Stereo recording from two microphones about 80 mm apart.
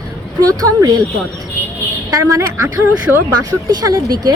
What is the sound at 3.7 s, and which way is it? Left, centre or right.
Speech, right.